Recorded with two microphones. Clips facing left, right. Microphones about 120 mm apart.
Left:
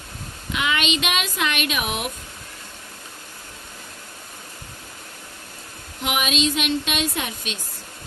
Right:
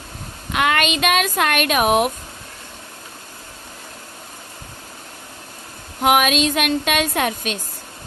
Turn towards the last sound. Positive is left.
turn(degrees=-55)  # may be behind; listen again after turning